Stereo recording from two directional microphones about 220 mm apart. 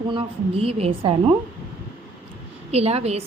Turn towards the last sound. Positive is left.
turn(degrees=-30)  # may be behind; listen again after turning